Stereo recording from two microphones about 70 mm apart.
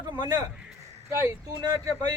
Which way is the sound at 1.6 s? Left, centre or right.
Right.